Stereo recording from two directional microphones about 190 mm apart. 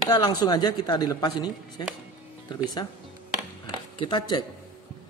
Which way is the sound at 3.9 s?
25° left (ahead or behind).